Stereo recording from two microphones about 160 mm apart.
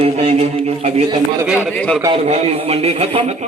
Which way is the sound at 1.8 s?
5° left (ahead or behind).